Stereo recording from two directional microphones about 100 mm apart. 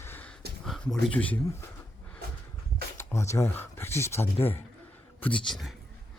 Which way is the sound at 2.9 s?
30° left (ahead or behind).